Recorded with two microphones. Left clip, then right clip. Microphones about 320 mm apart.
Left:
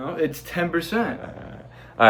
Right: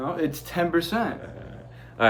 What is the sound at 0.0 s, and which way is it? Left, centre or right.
Speech, centre.